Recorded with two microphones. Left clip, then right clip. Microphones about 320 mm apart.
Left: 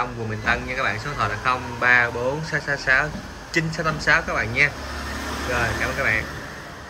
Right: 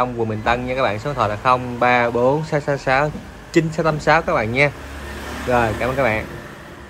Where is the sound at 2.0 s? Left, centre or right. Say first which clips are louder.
Right 6 dB; centre.